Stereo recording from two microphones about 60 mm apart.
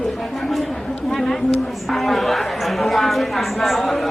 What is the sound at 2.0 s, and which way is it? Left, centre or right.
Speech, centre.